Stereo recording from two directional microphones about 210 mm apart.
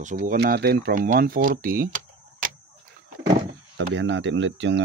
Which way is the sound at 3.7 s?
60° right (ahead or behind).